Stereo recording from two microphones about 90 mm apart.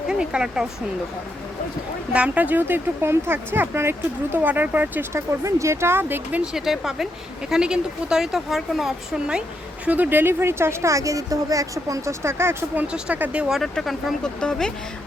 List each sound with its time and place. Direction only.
0.1 s speech: 10° right (ahead or behind)
2.1 s speech: 15° right (ahead or behind)
5.1 s speech: 35° right (ahead or behind)
6.4 s speech: 5° right (ahead or behind); by 12.8 s 30° right (ahead or behind)
12.9 s speech: 15° right (ahead or behind)
13.6 s speech: centre (ahead or behind)